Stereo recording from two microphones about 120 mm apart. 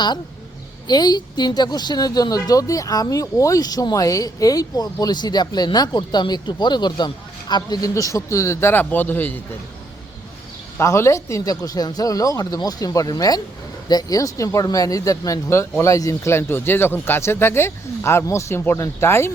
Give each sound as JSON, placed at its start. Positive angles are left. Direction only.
{"t": 0.9, "sound": "a woman's voice", "side_deg": 35}
{"t": 10.8, "sound": "speech", "side_deg": 20}